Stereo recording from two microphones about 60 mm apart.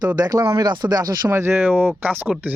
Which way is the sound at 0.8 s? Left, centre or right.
Right.